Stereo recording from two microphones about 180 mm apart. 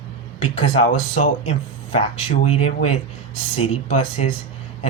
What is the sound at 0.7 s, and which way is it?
A man's voice, 35° left (ahead or behind).